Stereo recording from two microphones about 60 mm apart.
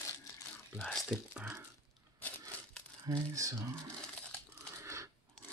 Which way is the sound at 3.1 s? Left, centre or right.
Right.